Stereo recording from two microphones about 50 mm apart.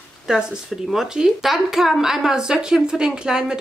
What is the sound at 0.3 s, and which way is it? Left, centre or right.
Speech, centre.